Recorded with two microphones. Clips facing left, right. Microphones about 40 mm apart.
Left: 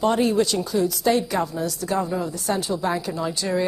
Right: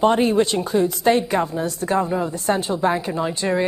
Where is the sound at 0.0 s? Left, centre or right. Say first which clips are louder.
Right 3 dB; right.